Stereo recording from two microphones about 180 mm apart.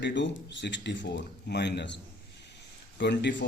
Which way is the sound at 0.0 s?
90° left.